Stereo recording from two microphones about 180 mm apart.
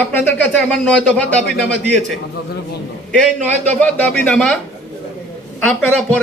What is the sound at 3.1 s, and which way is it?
A man's voice, 5° left (ahead or behind).